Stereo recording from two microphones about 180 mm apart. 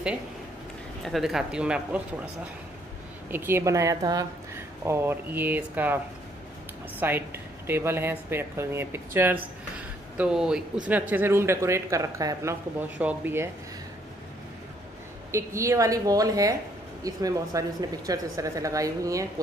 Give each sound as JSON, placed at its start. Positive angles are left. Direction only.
{"t": 1.0, "sound": "speech", "side_deg": 0}
{"t": 3.3, "sound": "speech", "side_deg": -10}
{"t": 7.0, "sound": "speech", "side_deg": -10}
{"t": 15.3, "sound": "a woman's voice", "side_deg": -15}